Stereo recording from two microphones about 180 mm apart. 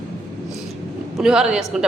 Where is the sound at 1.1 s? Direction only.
5° right (ahead or behind).